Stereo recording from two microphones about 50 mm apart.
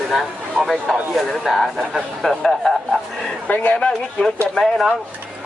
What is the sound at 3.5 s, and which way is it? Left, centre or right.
Speech, left.